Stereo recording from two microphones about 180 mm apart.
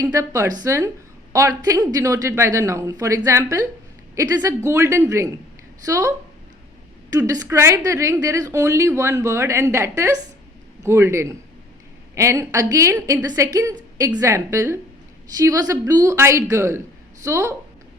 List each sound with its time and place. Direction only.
0.0 s a woman's voice: 20° right (ahead or behind)